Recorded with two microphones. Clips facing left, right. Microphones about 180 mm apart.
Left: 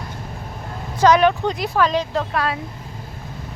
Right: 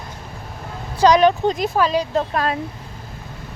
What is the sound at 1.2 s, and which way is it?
Speech, 30° right (ahead or behind).